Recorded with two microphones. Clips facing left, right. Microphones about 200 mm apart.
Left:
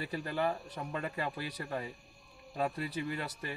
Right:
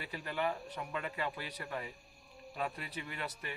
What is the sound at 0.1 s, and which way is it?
A man's voice, 40° left (ahead or behind).